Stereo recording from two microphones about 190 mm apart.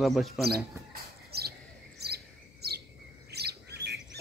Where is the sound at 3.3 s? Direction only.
60° right (ahead or behind).